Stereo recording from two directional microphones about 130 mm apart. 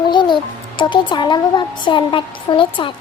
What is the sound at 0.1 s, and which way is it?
Music, 35° left (ahead or behind).